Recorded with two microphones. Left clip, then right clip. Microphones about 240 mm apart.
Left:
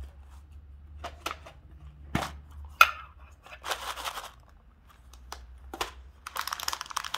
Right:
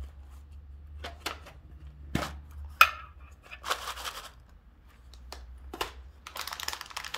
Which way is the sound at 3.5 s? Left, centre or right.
Centre.